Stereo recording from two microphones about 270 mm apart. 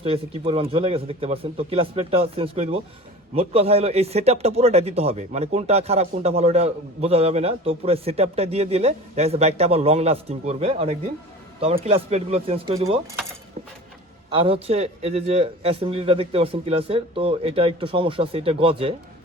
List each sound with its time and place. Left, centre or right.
0.0 s speech: right
14.3 s speech: centre